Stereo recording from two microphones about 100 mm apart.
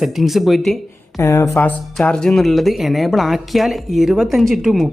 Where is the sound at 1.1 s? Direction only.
25° left (ahead or behind).